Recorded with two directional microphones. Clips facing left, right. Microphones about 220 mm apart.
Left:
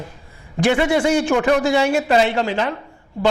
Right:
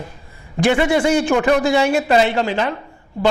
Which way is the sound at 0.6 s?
15° right (ahead or behind).